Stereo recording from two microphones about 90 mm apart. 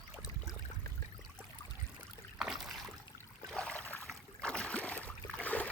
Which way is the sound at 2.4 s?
5° right (ahead or behind).